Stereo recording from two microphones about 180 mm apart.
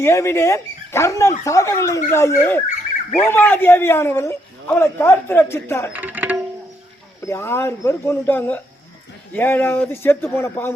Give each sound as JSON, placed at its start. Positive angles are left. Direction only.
{"t": 0.0, "sound": "a man's voice", "side_deg": 15}
{"t": 5.9, "sound": "music", "side_deg": -10}
{"t": 7.3, "sound": "a man's voice", "side_deg": 15}